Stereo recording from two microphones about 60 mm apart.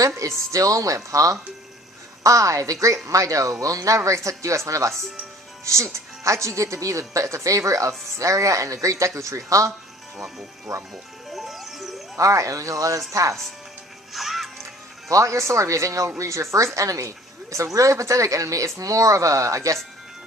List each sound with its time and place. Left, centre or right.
0.2 s speech: right
10.2 s speech: centre
10.7 s speech: right
11.3 s music: centre
12.1 s speech: right
14.1 s music: centre
15.1 s speech: right